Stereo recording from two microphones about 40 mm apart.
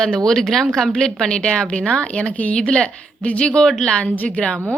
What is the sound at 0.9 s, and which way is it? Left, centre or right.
A woman's voice, centre.